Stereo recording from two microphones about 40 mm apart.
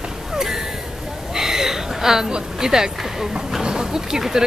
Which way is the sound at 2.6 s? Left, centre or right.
Centre.